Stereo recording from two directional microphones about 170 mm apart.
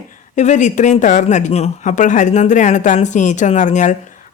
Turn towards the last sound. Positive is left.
turn(degrees=45)  # may be behind; listen again after turning